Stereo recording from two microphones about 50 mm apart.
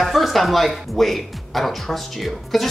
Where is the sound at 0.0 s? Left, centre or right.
Centre.